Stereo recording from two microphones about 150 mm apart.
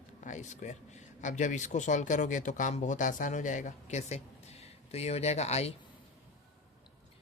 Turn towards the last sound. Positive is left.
turn(degrees=45)  # may be behind; listen again after turning